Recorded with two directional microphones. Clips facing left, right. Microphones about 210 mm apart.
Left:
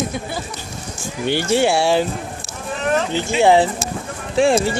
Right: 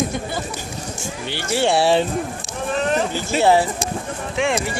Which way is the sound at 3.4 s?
20° left (ahead or behind).